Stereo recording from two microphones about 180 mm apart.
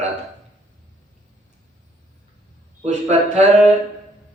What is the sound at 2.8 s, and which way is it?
Speech, 40° right (ahead or behind).